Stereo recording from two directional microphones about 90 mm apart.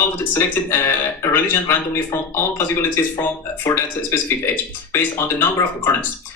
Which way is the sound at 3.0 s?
30° left (ahead or behind).